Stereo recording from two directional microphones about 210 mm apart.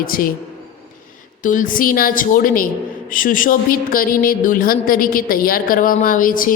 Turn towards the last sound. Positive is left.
turn(degrees=40)  # may be behind; listen again after turning